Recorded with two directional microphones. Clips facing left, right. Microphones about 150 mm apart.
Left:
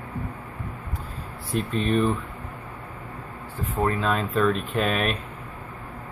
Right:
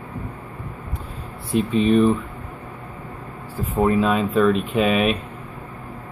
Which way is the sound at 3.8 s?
5° right (ahead or behind).